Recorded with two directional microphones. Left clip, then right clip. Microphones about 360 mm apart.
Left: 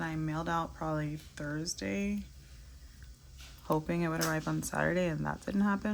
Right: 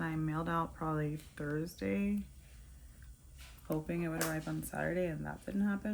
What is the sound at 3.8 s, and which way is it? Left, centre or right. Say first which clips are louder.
Speech: left 4 dB; centre.